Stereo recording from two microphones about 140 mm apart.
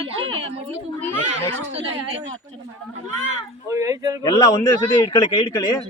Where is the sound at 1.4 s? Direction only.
50° right (ahead or behind).